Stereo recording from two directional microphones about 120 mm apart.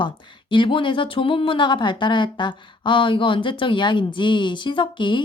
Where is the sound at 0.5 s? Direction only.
45° left (ahead or behind).